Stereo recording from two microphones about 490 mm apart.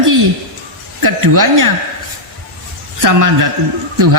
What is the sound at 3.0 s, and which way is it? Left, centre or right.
Speech, right.